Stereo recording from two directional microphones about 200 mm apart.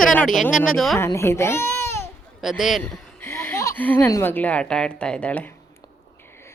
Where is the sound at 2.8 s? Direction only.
10° left (ahead or behind).